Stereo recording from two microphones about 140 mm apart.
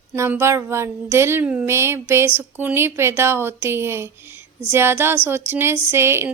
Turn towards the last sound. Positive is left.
turn(degrees=-20)  # may be behind; listen again after turning